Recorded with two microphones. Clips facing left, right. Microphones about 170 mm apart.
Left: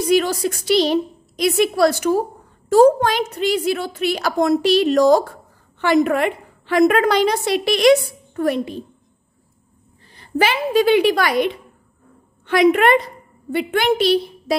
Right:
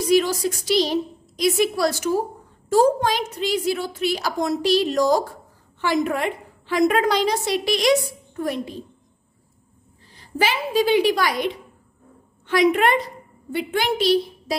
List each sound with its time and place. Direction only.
0.1 s a woman's voice: 60° left (ahead or behind)
10.1 s a woman's voice: 60° left (ahead or behind)